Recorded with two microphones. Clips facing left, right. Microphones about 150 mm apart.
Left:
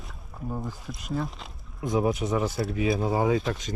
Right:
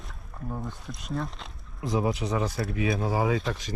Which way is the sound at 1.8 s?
20° left (ahead or behind).